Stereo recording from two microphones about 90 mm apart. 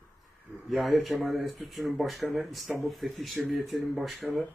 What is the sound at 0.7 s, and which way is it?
Speech, centre (ahead or behind).